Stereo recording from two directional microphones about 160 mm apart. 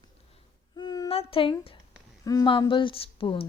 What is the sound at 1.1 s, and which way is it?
Speech, 35° left (ahead or behind).